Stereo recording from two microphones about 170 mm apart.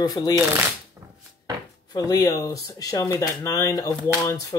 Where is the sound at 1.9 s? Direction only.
20° left (ahead or behind).